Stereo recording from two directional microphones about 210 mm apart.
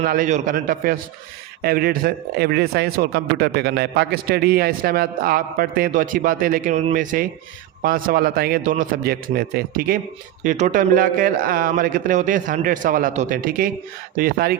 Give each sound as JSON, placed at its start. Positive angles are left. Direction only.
{"t": 0.0, "sound": "a man's voice", "side_deg": -40}